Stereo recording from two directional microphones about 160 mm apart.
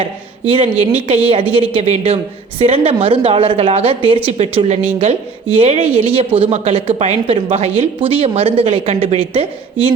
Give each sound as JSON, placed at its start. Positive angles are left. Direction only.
{"t": 0.5, "sound": "speech", "side_deg": -40}